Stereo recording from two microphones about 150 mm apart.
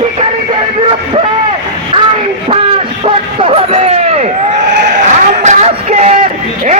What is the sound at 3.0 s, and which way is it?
Speech, 40° right (ahead or behind).